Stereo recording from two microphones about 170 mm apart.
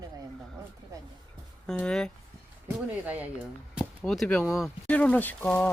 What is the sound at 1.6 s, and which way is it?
Speech, 5° left (ahead or behind).